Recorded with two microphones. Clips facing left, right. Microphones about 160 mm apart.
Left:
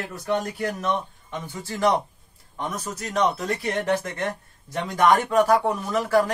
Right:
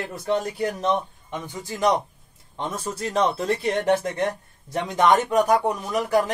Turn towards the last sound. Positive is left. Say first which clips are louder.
# left 1 dB
turn(degrees=-15)  # may be behind; listen again after turning